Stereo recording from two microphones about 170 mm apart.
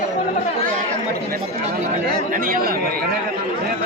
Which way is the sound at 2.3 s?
55° right (ahead or behind).